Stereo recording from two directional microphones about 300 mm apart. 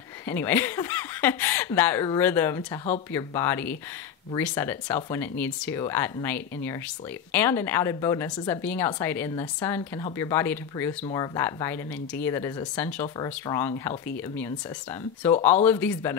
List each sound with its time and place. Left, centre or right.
0.3 s a woman's voice: centre
15.4 s a woman's voice: centre